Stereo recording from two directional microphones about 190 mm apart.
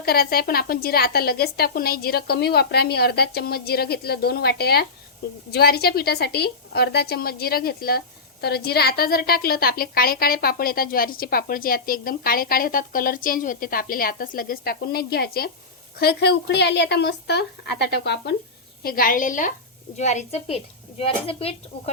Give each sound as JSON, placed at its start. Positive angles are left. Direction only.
{"t": 0.0, "sound": "a woman's voice", "side_deg": 55}
{"t": 18.8, "sound": "a woman's voice", "side_deg": 50}